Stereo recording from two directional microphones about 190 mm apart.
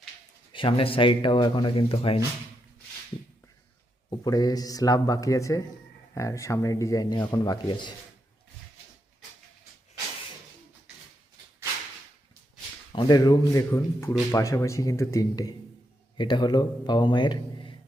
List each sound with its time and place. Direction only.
0.5 s speech: 30° left (ahead or behind)
4.1 s speech: 20° left (ahead or behind)
12.9 s speech: 25° left (ahead or behind)